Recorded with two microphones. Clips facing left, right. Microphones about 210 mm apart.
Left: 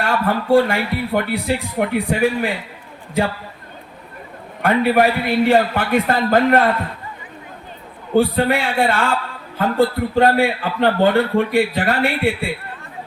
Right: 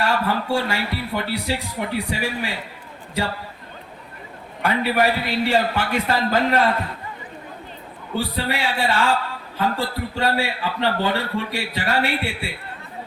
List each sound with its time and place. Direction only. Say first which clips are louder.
0.0 s speech: left 2 dB; 55° left (ahead or behind)
4.6 s a man's voice: left 5 dB; 55° left (ahead or behind)
8.1 s a man's voice: left 9 dB; 55° left (ahead or behind)